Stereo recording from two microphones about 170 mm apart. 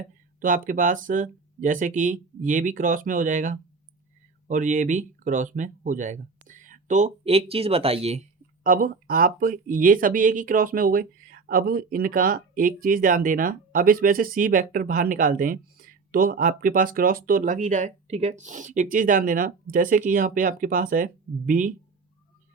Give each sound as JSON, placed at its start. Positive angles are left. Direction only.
{"t": 0.3, "sound": "speech", "side_deg": -50}